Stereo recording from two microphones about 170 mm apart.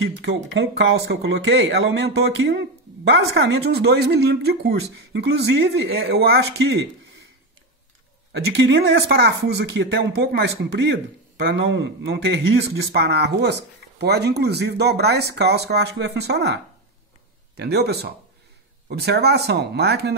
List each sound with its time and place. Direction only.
0.2 s speech: 90° right
3.1 s speech: 80° right
8.3 s speech: 90° right
9.5 s speech: 85° right
17.6 s speech: 70° right (ahead or behind)